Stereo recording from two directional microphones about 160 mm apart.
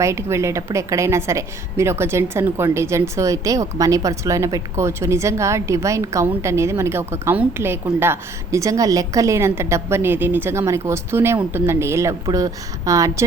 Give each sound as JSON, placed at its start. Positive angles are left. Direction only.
{"t": 0.0, "sound": "a woman's voice", "side_deg": -15}